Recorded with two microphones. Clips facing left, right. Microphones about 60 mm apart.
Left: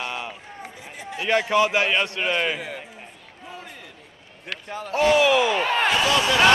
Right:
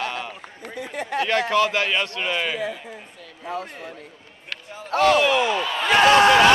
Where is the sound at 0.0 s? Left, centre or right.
Centre.